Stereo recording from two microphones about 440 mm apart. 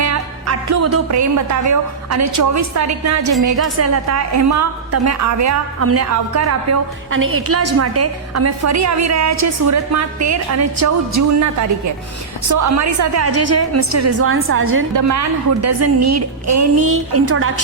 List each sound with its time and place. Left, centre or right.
0.0 s a woman's voice: right
12.5 s a woman's voice: right
14.9 s a woman's voice: right